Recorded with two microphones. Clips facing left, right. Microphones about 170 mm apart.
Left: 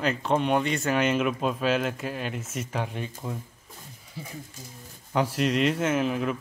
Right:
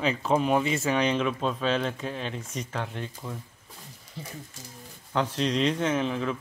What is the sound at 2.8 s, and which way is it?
Speech, 15° left (ahead or behind).